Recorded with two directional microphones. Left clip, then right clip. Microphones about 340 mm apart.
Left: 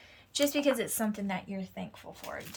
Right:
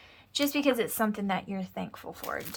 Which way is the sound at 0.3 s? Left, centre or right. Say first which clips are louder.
Right 1 dB; centre.